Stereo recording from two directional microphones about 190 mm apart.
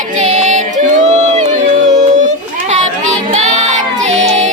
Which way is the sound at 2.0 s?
40° right (ahead or behind).